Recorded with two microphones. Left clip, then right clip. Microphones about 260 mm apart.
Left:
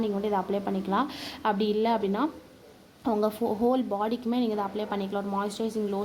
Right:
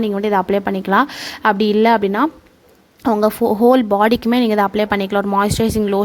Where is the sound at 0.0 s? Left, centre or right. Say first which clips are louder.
Right 11 dB; right.